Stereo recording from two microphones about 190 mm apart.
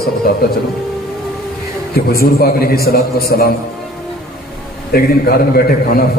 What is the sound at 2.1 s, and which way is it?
A man's voice, 50° left (ahead or behind).